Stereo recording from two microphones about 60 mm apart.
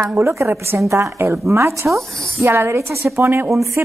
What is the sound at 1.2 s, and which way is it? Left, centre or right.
A woman's voice, right.